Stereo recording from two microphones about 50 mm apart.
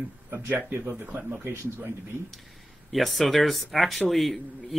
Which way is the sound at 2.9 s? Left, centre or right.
Centre.